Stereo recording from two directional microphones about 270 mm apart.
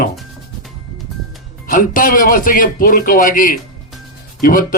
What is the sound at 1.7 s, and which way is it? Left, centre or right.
A man's voice, left.